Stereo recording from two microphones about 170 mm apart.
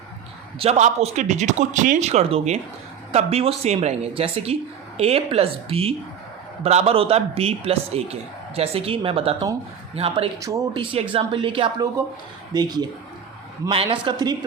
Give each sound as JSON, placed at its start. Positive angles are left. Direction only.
{"t": 0.6, "sound": "a man's voice", "side_deg": -40}
{"t": 10.4, "sound": "a woman's voice", "side_deg": -20}
{"t": 11.1, "sound": "a woman's voice", "side_deg": -30}